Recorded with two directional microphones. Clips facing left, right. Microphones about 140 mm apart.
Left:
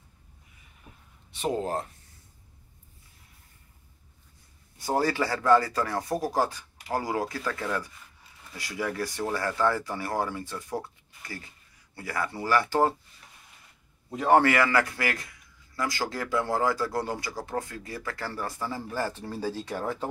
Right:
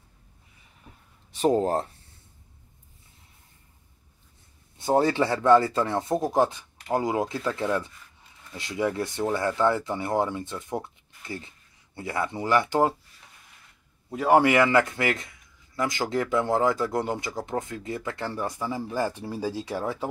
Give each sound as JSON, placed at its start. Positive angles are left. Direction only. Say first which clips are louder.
{"t": 1.3, "sound": "speech", "louder": "right 6 dB", "side_deg": -35}
{"t": 4.7, "sound": "a man's voice", "louder": "right 4 dB", "side_deg": -25}
{"t": 14.1, "sound": "a man's voice", "louder": "right 2 dB", "side_deg": -10}